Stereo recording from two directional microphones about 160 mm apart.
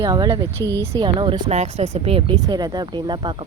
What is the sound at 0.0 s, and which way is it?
Speech, 25° right (ahead or behind).